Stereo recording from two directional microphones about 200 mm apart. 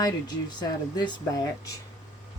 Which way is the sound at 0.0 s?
20° left (ahead or behind).